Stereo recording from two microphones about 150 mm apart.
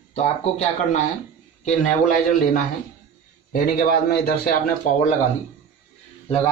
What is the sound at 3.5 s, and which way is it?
Speech, 75° left (ahead or behind).